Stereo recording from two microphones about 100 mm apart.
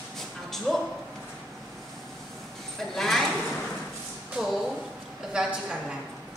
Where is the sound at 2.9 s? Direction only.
5° left (ahead or behind).